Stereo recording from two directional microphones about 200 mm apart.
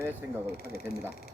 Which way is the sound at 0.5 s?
50° left (ahead or behind).